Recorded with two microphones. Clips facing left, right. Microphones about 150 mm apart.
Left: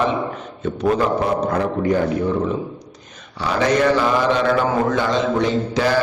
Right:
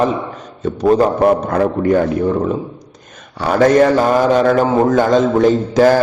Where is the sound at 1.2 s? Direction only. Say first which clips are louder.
Right 6 dB; 55° right (ahead or behind).